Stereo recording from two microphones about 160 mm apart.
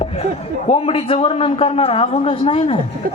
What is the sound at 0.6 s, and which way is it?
A man's voice, 35° left (ahead or behind).